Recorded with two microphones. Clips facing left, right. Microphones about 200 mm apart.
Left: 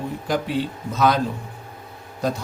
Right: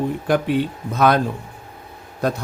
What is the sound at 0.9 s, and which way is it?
Speech, 55° right (ahead or behind).